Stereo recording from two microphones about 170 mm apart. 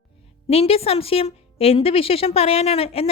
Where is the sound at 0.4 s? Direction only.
35° left (ahead or behind).